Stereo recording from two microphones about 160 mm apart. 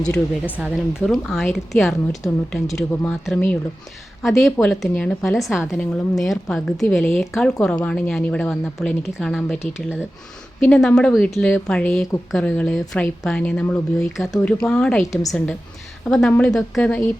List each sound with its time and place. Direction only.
0.0 s speech: 5° left (ahead or behind)
0.5 s speech: 5° right (ahead or behind)
4.2 s speech: centre (ahead or behind)
15.0 s a woman's voice: 20° left (ahead or behind)
15.3 s speech: 5° left (ahead or behind)